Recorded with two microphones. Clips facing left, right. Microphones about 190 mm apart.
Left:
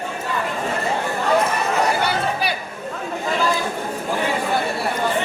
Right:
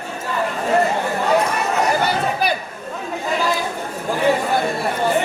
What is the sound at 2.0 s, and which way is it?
Chatter, 45° right (ahead or behind).